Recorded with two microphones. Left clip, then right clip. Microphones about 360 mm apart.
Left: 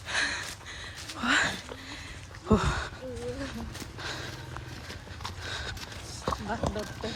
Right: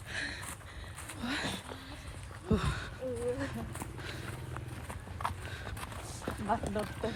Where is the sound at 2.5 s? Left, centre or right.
Centre.